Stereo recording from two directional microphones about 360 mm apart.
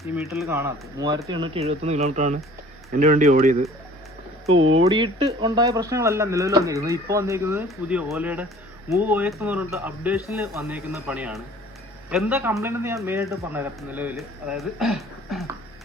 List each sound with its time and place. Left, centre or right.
0.2 s speech: centre
4.5 s speech: right
4.8 s a man's voice: centre